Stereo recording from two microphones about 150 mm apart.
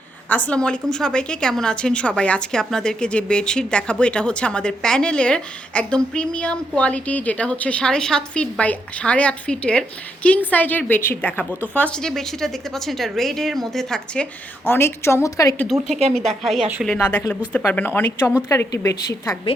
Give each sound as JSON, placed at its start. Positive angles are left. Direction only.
{"t": 0.3, "sound": "a woman's voice", "side_deg": 10}
{"t": 14.6, "sound": "a woman's voice", "side_deg": 15}
{"t": 15.5, "sound": "a woman's voice", "side_deg": 0}